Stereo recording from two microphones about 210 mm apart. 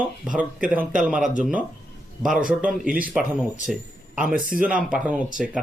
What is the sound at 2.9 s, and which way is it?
Speech, 40° right (ahead or behind).